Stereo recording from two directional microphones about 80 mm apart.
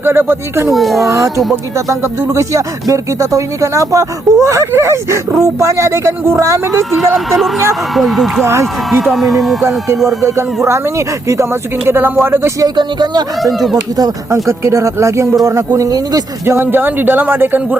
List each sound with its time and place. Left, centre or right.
0.0 s speech: right
0.7 s speech: centre
1.9 s speech: right
6.9 s speech: centre
10.2 s speech: right
12.5 s speech: right
13.4 s speech: centre
14.3 s speech: right
16.6 s speech: right